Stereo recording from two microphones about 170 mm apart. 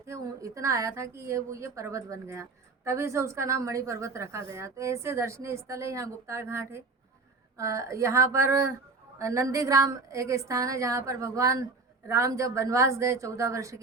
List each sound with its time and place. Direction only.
0.0 s a woman's voice: 20° right (ahead or behind)